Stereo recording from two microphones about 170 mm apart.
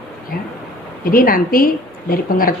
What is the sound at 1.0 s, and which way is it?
A woman's voice, 55° left (ahead or behind).